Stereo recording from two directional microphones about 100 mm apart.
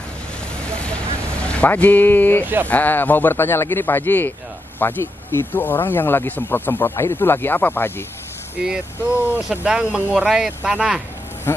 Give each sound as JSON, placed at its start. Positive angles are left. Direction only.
{"t": 0.6, "sound": "vehicle", "side_deg": 10}
{"t": 1.5, "sound": "speech", "side_deg": 15}
{"t": 2.4, "sound": "speech", "side_deg": -20}
{"t": 2.7, "sound": "speech", "side_deg": 20}
{"t": 8.5, "sound": "speech", "side_deg": -10}